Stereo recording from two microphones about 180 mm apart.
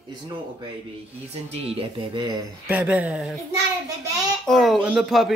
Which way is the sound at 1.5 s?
30° right (ahead or behind).